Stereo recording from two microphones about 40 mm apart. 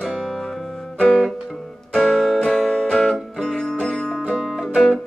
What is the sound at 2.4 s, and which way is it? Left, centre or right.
Music, centre.